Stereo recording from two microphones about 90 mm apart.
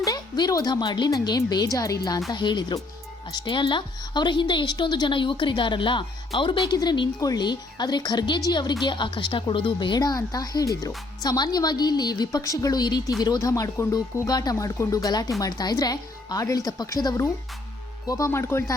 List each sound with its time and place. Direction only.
0.0 s a woman's voice: 45° left (ahead or behind)
2.3 s a woman's voice: 55° left (ahead or behind)
7.2 s a woman's voice: 45° left (ahead or behind)
14.3 s a woman's voice: 45° left (ahead or behind)
14.5 s a woman's voice: 35° left (ahead or behind)
18.3 s speech: 30° left (ahead or behind)